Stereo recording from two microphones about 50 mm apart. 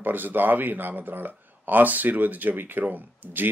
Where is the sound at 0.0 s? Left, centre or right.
Right.